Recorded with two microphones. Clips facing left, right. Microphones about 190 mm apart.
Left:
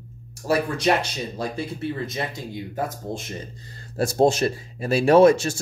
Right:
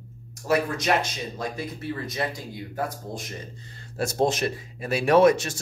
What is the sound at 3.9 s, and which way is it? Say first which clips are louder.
Speech: left 5 dB; 35° left (ahead or behind).